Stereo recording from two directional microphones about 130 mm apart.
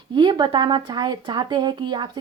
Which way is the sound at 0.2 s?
35° right (ahead or behind).